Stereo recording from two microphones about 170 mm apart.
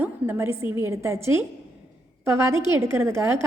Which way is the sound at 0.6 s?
15° right (ahead or behind).